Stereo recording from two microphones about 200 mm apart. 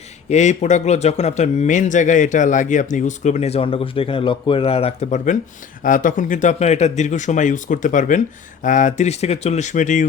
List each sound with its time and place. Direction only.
0.3 s speech: 35° left (ahead or behind)